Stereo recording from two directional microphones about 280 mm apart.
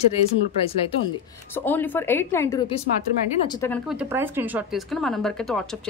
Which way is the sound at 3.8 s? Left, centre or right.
Centre.